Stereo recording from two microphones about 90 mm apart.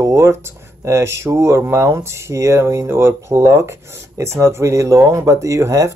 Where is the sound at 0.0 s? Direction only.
35° right (ahead or behind).